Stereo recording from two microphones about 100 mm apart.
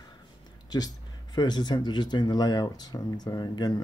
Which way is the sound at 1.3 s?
45° left (ahead or behind).